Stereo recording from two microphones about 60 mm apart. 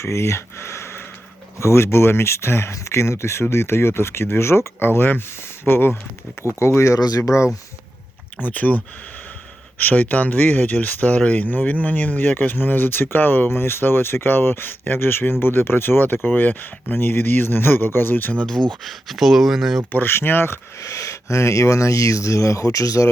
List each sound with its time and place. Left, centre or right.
0.0 s speech: left
6.6 s speech: left
8.4 s speech: left
18.4 s speech: centre
19.9 s speech: left
20.7 s speech: left